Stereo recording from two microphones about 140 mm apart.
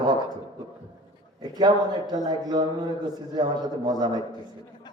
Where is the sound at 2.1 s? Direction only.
30° right (ahead or behind).